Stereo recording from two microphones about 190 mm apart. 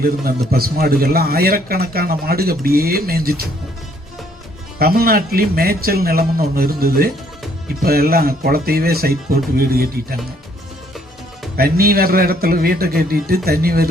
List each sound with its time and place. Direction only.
0.0 s a man's voice: 50° right (ahead or behind)
4.8 s a man's voice: 50° right (ahead or behind)
11.5 s a man's voice: 50° right (ahead or behind)